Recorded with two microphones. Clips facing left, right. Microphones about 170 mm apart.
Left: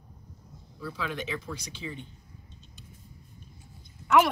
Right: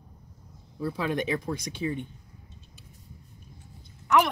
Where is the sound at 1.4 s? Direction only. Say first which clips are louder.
Right 8 dB; 55° right (ahead or behind).